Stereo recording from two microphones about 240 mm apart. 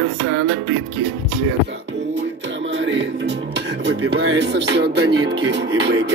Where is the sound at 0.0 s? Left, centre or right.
Right.